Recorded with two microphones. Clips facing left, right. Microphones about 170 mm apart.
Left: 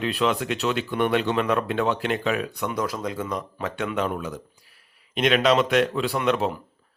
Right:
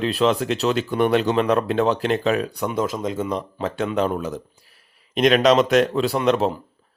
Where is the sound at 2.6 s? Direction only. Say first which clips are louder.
Right 3 dB; 25° right (ahead or behind).